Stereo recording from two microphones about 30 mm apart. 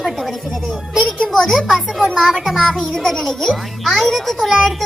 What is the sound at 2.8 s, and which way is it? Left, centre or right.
Child singing, left.